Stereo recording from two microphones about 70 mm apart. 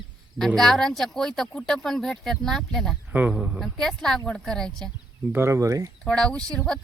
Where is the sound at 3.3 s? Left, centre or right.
Centre.